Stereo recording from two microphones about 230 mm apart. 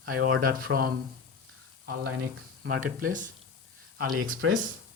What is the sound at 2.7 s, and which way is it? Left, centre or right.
Speech, right.